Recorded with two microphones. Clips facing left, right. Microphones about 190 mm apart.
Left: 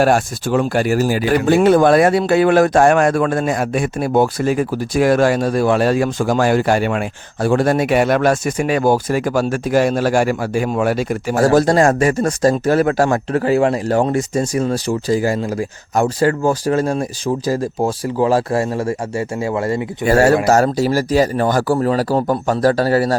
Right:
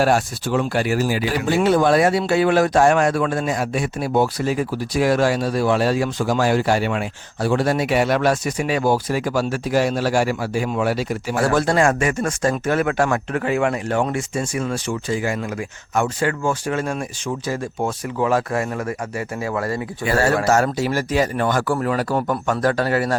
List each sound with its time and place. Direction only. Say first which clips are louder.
0.0 s speech: left 3 dB; 50° left (ahead or behind); by 19.8 s 25° left (ahead or behind)
20.1 s speech: left 6 dB; 40° left (ahead or behind)